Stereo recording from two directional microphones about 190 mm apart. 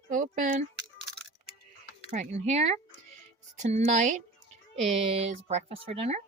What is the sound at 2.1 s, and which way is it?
Speech, 35° right (ahead or behind).